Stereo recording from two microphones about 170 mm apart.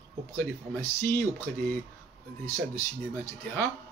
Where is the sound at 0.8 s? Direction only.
15° left (ahead or behind).